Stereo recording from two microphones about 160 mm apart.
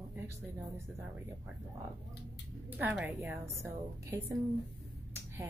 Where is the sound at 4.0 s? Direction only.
20° right (ahead or behind).